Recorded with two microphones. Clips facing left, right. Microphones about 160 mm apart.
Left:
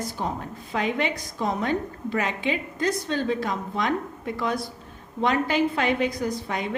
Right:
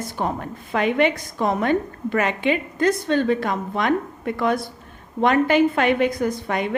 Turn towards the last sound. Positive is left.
turn(degrees=-60)  # may be behind; listen again after turning